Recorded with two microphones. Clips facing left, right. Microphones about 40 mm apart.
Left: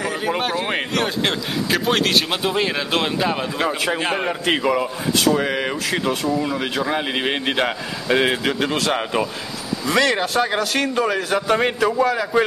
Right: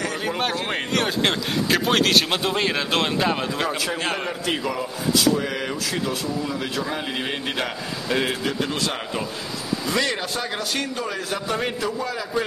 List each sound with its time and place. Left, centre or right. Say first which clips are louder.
0.4 s a man's voice: left 3 dB; centre
4.0 s a man's voice: left 4 dB; centre
4.3 s speech: left 6 dB; left
8.5 s a man's voice: left 4 dB; left
8.9 s a man's voice: left 7 dB; left
9.8 s a man's voice: left 7 dB; left